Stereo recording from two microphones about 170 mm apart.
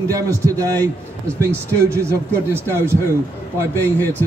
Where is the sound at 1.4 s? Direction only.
15° right (ahead or behind).